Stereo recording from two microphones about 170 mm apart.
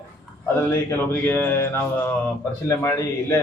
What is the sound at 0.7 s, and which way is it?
Mantra, 10° left (ahead or behind).